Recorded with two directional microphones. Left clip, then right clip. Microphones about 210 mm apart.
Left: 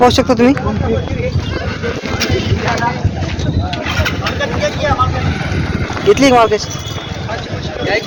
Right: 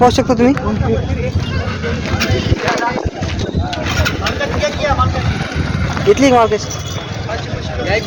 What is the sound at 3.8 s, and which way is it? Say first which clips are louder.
Vehicle: even; 40° right (ahead or behind).